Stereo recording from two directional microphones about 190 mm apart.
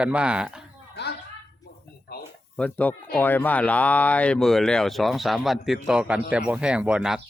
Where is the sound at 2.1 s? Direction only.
55° left (ahead or behind).